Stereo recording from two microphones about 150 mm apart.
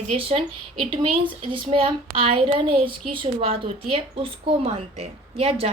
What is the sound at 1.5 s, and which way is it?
A woman's voice, 35° right (ahead or behind).